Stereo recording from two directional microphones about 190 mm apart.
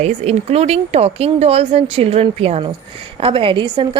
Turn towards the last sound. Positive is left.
turn(degrees=-25)  # may be behind; listen again after turning